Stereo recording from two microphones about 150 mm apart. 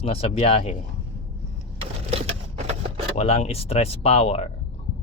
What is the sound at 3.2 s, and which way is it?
Speech, 45° left (ahead or behind).